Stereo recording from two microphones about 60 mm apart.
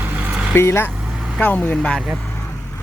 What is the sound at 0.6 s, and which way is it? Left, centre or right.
Speech, left.